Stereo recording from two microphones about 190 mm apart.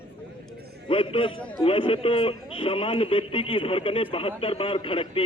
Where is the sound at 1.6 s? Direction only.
30° left (ahead or behind).